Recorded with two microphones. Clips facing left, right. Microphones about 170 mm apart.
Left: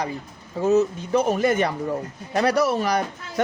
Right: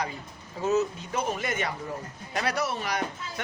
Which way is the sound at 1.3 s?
40° left (ahead or behind).